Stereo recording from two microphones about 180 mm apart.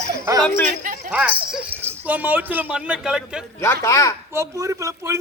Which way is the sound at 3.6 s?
15° left (ahead or behind).